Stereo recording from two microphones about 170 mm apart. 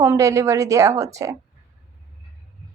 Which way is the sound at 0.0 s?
15° right (ahead or behind).